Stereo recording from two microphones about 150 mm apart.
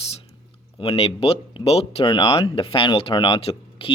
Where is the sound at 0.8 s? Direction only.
40° left (ahead or behind).